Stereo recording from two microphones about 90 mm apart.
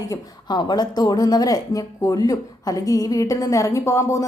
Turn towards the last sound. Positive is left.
turn(degrees=35)  # may be behind; listen again after turning